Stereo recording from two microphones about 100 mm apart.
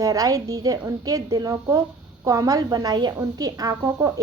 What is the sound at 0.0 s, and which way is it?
A woman's voice, 35° right (ahead or behind).